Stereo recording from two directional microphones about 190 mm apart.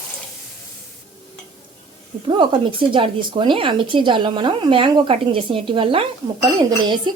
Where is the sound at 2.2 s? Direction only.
25° right (ahead or behind).